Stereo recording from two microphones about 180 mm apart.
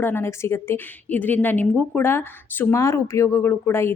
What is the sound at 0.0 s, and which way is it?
A woman's voice, 10° left (ahead or behind).